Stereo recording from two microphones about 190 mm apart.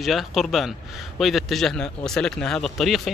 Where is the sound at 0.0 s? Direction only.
Centre (ahead or behind).